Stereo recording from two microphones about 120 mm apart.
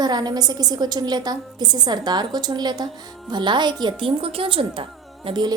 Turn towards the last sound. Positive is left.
turn(degrees=-40)  # may be behind; listen again after turning